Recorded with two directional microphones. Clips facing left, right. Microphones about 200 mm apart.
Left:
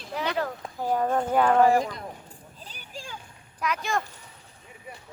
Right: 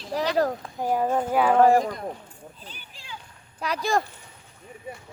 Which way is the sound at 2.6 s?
40° left (ahead or behind).